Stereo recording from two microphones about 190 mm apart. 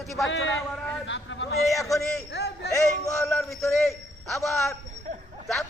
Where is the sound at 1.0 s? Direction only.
70° left (ahead or behind).